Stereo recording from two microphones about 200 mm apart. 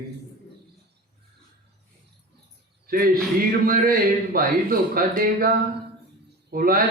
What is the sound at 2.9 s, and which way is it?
A man's voice, 45° right (ahead or behind).